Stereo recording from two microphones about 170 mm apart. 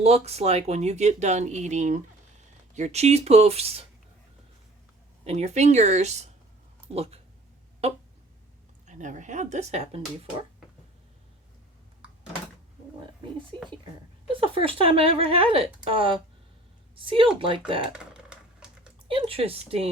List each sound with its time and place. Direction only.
0.0 s speech: 40° right (ahead or behind)
5.2 s speech: 40° right (ahead or behind)
8.9 s speech: 45° right (ahead or behind)
14.4 s a woman's voice: 30° right (ahead or behind)
17.9 s typewriter: 5° right (ahead or behind)
19.0 s speech: 30° right (ahead or behind)